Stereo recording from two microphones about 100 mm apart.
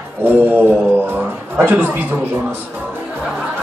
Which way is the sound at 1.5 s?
20° right (ahead or behind).